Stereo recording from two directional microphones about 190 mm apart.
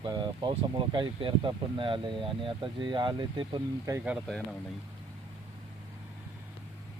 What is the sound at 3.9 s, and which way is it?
Speech, 5° right (ahead or behind).